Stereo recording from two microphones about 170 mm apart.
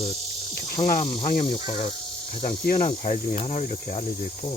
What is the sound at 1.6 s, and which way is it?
Insect, 30° left (ahead or behind).